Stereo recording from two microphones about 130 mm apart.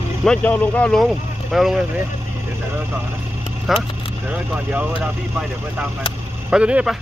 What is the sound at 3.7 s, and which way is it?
Speech, centre (ahead or behind).